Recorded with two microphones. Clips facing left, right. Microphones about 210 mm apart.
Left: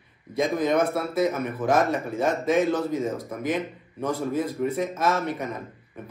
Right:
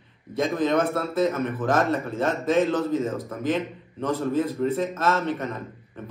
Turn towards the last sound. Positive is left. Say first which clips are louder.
# right 1 dB
turn(degrees=10)  # may be behind; listen again after turning